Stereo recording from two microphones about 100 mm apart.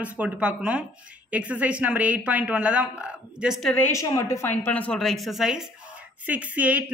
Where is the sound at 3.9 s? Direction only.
35° left (ahead or behind); by 5.0 s 15° left (ahead or behind).